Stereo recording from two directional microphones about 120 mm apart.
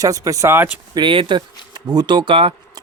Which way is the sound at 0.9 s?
45° right (ahead or behind).